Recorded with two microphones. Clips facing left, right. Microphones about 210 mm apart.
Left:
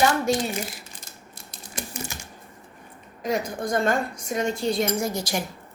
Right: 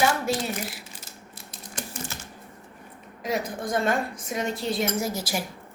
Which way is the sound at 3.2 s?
Centre (ahead or behind).